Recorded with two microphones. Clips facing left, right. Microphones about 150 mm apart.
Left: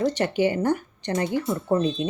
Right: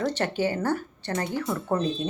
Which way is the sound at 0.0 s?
15° left (ahead or behind).